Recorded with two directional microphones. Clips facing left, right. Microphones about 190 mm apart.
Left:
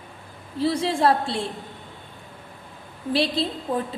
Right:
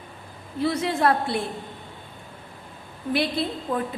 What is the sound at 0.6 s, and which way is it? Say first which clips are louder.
Speech: left 1 dB; 30° left (ahead or behind).